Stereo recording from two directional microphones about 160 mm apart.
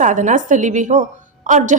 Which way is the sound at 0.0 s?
50° right (ahead or behind).